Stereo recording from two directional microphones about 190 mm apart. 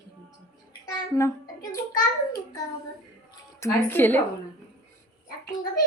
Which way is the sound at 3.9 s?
10° left (ahead or behind).